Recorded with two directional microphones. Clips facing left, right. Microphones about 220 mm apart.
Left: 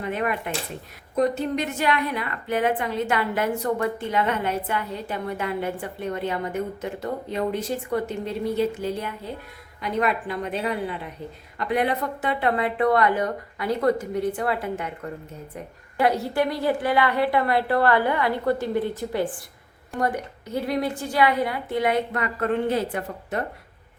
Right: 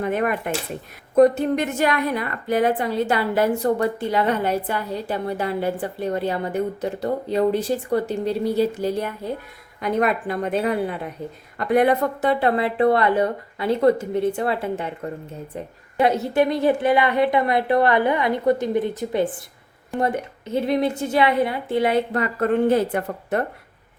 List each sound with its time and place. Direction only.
0.0 s a woman's voice: 45° right (ahead or behind)
22.7 s speech: 55° right (ahead or behind)